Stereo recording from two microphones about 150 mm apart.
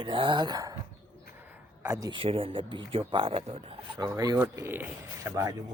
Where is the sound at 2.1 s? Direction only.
35° right (ahead or behind).